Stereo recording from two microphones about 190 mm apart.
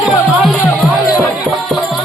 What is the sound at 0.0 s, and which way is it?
Music, 5° right (ahead or behind).